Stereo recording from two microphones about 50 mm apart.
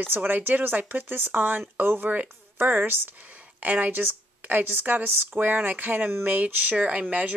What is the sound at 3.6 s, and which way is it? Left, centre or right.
Speech, right.